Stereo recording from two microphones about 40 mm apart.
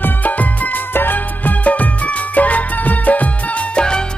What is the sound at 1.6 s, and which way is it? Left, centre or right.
Music, left.